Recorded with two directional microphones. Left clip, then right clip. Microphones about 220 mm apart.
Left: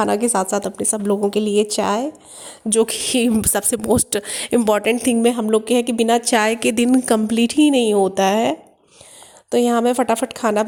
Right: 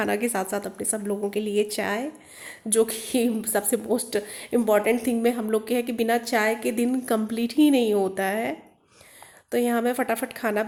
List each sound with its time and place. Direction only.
0.0 s a woman's voice: 25° left (ahead or behind)